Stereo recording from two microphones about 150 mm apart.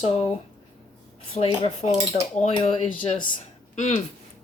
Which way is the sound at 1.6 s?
40° left (ahead or behind).